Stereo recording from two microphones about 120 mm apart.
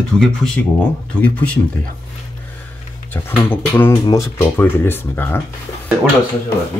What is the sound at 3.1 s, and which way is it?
Speech, 15° left (ahead or behind).